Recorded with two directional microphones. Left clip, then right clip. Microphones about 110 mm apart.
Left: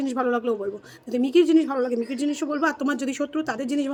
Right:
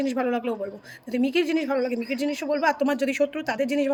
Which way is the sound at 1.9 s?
40° left (ahead or behind).